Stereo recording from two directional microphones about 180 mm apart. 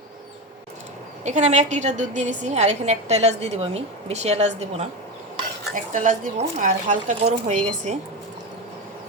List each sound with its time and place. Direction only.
1.2 s a woman's voice: 40° right (ahead or behind)